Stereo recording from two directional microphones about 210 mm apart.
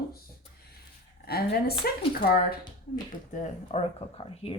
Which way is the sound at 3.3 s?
35° left (ahead or behind).